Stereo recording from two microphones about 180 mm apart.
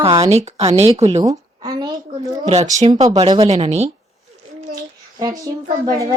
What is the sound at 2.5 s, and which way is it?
Speech, 40° right (ahead or behind).